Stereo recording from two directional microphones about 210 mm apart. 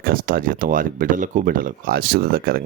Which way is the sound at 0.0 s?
45° right (ahead or behind).